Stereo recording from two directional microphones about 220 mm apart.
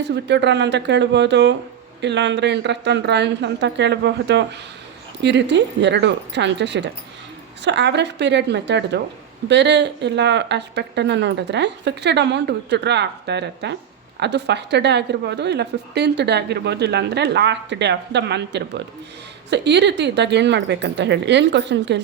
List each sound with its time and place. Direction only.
0.1 s a woman's voice: 50° right (ahead or behind)